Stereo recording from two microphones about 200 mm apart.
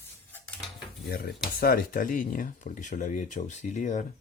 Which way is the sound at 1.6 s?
50° left (ahead or behind).